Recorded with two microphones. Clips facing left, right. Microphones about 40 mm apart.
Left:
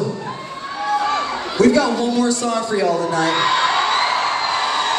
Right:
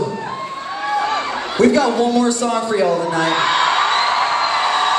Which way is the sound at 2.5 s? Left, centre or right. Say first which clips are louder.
Right 2 dB; centre.